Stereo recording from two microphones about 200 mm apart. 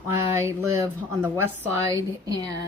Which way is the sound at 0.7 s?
15° right (ahead or behind).